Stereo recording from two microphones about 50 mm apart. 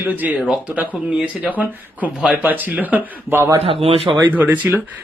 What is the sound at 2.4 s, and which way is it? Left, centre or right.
Speech, right.